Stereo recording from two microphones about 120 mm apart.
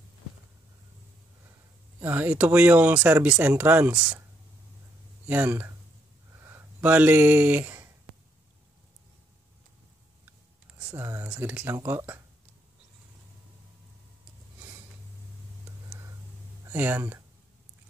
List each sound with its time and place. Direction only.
2.0 s speech: 15° right (ahead or behind)
5.2 s speech: 15° right (ahead or behind)
6.4 s a sound: 15° right (ahead or behind)
11.0 s speech: 20° right (ahead or behind)
16.6 s speech: 15° right (ahead or behind)